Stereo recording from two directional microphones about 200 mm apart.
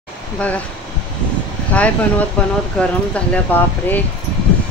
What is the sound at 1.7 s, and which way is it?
A woman's voice, 5° left (ahead or behind).